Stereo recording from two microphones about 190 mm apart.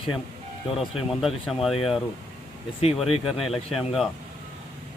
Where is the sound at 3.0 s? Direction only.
Centre (ahead or behind).